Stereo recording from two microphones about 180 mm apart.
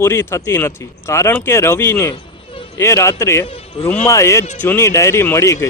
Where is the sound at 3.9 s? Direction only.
15° left (ahead or behind).